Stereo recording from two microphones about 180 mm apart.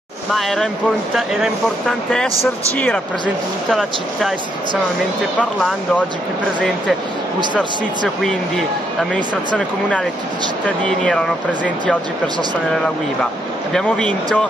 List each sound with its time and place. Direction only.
0.3 s speech: centre (ahead or behind)
5.4 s speech: 5° left (ahead or behind)
8.2 s speech: centre (ahead or behind)
10.8 s speech: 5° left (ahead or behind)
13.7 s speech: 5° left (ahead or behind)